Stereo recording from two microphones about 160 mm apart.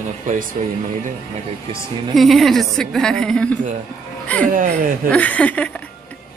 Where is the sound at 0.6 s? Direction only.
45° right (ahead or behind).